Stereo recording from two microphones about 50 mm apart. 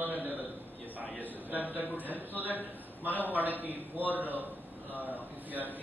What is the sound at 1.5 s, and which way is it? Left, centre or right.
A man's voice, right.